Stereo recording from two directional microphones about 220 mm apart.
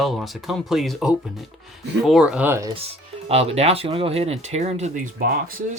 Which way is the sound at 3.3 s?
30° right (ahead or behind).